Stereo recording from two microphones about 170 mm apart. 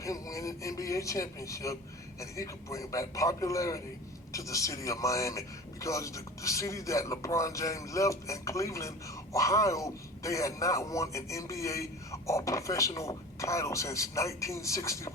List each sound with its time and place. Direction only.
0.0 s speech: 20° left (ahead or behind)